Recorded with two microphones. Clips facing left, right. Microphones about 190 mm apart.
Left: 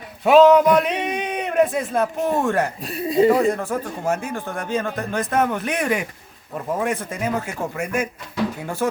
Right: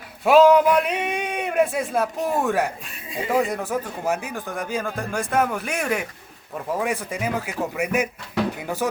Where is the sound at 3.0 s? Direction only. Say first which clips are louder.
Left 15 dB; 35° left (ahead or behind).